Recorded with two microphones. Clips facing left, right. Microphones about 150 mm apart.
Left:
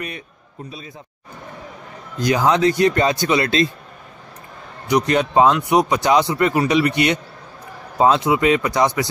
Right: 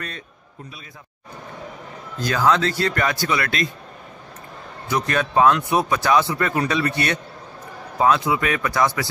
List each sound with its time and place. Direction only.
2.1 s speech: 15° left (ahead or behind)
4.8 s speech: 20° left (ahead or behind)